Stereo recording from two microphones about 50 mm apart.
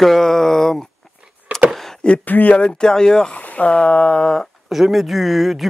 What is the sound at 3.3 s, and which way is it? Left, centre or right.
Speech, left.